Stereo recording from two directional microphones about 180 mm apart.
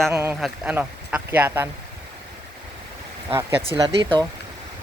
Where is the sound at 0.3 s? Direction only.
5° right (ahead or behind).